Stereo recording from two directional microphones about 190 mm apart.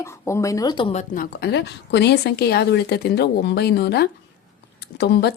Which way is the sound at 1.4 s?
60° left (ahead or behind).